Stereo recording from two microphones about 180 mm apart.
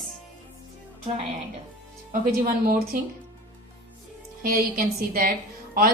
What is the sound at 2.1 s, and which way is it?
Speech, 50° right (ahead or behind).